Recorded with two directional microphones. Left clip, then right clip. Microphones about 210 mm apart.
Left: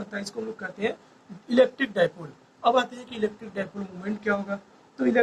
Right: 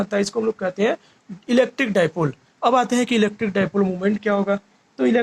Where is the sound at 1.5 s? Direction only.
40° right (ahead or behind).